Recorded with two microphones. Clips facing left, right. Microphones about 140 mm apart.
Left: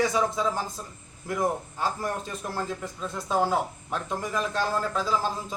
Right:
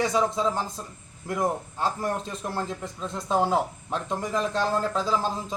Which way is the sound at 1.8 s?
25° right (ahead or behind).